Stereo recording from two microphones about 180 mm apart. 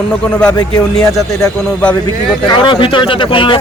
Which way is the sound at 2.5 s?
25° left (ahead or behind).